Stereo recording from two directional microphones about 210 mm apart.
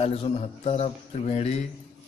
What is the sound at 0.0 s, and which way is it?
Speech, 30° left (ahead or behind).